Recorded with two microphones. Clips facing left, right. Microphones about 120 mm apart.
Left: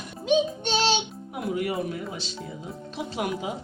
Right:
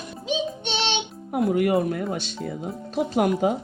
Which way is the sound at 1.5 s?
55° right (ahead or behind).